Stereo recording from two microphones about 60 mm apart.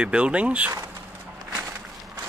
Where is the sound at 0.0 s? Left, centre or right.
Centre.